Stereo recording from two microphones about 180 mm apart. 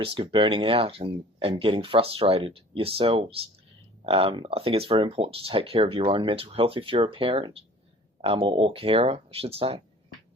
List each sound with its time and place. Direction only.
0.0 s speech: 30° right (ahead or behind)